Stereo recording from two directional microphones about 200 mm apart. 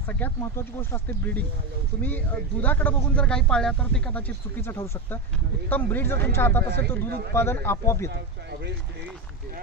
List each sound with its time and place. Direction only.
0.2 s speech: 10° left (ahead or behind)
8.1 s speech: 55° right (ahead or behind)